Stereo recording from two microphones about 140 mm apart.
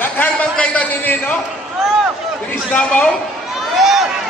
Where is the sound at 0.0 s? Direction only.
10° left (ahead or behind).